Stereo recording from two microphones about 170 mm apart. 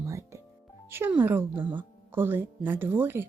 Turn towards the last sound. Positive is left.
turn(degrees=-10)  # may be behind; listen again after turning